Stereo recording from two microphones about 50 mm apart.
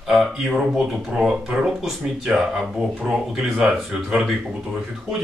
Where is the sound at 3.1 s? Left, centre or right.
Centre.